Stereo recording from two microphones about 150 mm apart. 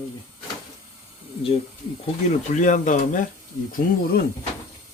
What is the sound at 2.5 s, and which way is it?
Speech, 60° left (ahead or behind).